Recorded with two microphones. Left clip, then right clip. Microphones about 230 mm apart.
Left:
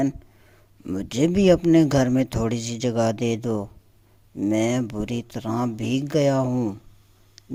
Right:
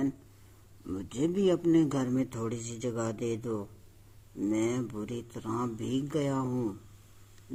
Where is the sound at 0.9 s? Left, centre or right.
Left.